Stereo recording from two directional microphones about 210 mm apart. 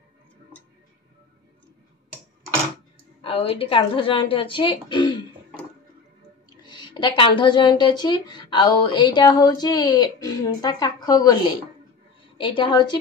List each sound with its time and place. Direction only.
3.3 s a woman's voice: 25° left (ahead or behind)
6.6 s a woman's voice: 20° left (ahead or behind)